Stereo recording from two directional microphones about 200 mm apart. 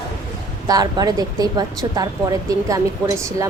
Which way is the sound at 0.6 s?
20° right (ahead or behind).